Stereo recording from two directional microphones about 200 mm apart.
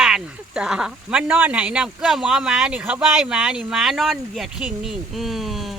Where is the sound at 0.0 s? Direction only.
5° right (ahead or behind).